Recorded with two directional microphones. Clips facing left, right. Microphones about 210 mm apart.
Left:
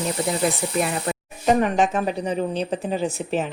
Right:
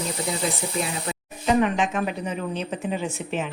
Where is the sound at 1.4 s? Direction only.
40° left (ahead or behind).